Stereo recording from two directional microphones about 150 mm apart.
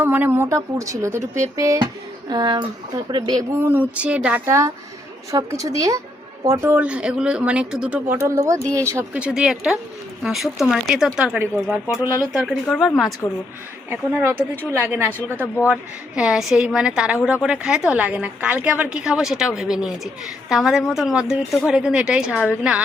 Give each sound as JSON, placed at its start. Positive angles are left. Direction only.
{"t": 0.0, "sound": "speech", "side_deg": -10}
{"t": 3.6, "sound": "speech", "side_deg": -10}
{"t": 8.1, "sound": "speech", "side_deg": -20}
{"t": 9.2, "sound": "a woman's voice", "side_deg": -5}
{"t": 12.4, "sound": "a woman's voice", "side_deg": 0}
{"t": 13.9, "sound": "a woman's voice", "side_deg": -15}